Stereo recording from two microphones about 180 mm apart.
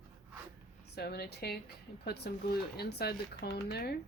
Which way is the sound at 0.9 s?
65° left (ahead or behind).